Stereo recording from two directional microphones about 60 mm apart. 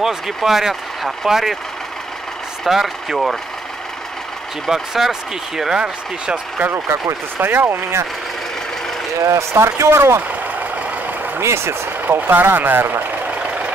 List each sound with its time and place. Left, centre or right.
0.0 s speech: centre
2.6 s speech: centre
4.6 s speech: centre
6.7 s speech: right
7.3 s speech: right
9.2 s speech: right
11.4 s speech: right